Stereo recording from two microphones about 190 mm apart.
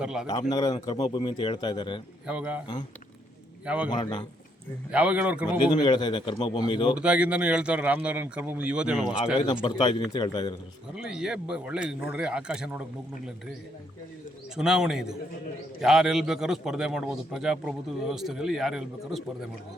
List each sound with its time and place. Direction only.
0.0 s a man's voice: 5° right (ahead or behind)
0.3 s a man's voice: 20° left (ahead or behind)
2.2 s speech: 5° right (ahead or behind)
3.8 s a man's voice: 25° left (ahead or behind)
4.9 s speech: 5° right (ahead or behind)
5.7 s a man's voice: 25° left (ahead or behind)
6.9 s speech: 5° right (ahead or behind)
9.6 s a man's voice: 25° left (ahead or behind)
10.9 s a man's voice: 5° right (ahead or behind)
14.5 s a man's voice: 5° right (ahead or behind)